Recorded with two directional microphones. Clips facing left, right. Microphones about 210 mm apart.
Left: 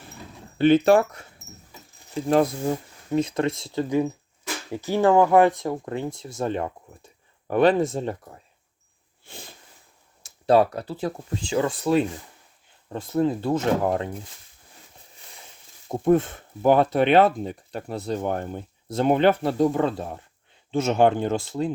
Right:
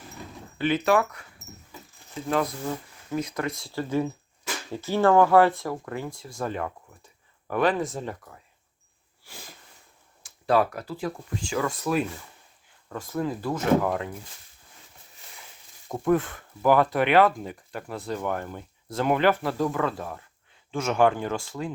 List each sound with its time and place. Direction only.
0.6 s speech: 30° left (ahead or behind)
10.2 s speech: 25° left (ahead or behind)
15.9 s speech: 20° left (ahead or behind)